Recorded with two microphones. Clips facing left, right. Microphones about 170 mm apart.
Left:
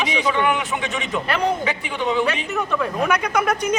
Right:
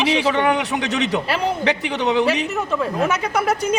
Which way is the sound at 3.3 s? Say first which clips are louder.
Even; 25° right (ahead or behind).